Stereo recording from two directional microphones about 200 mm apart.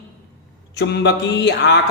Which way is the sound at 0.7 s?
55° left (ahead or behind).